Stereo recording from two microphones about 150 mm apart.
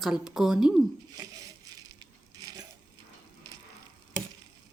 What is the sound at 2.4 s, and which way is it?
Coin, 25° right (ahead or behind).